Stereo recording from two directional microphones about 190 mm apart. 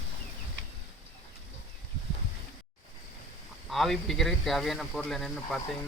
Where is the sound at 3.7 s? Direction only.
Centre (ahead or behind).